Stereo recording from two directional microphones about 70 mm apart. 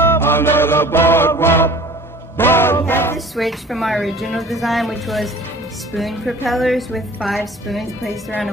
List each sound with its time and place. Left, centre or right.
0.0 s music: left
3.3 s a woman's voice: centre